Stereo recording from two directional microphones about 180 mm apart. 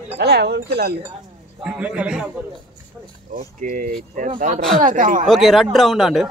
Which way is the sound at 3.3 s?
50° right (ahead or behind).